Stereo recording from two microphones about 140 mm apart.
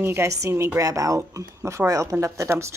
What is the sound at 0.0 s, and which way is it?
A woman's voice, 15° right (ahead or behind).